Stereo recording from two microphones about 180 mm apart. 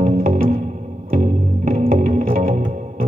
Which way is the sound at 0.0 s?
45° right (ahead or behind).